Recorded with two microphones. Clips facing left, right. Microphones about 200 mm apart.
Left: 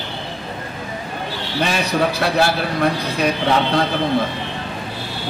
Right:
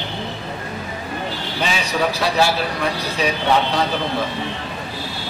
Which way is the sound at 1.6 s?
55° left (ahead or behind).